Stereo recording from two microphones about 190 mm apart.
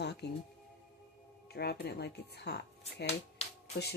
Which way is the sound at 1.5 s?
60° left (ahead or behind).